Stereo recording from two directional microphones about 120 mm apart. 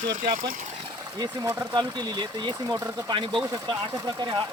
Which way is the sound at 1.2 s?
30° right (ahead or behind).